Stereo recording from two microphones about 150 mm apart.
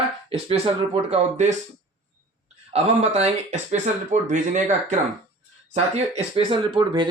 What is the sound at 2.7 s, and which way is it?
Speech, 50° right (ahead or behind).